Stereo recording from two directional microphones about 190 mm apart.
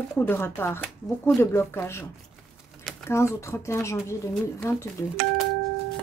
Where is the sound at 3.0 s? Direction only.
15° left (ahead or behind).